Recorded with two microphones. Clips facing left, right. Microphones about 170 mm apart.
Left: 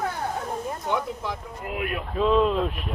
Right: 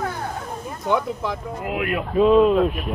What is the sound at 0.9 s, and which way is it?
Speech, 90° right.